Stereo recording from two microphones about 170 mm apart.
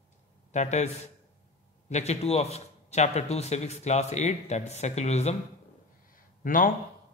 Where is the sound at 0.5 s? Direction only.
45° left (ahead or behind).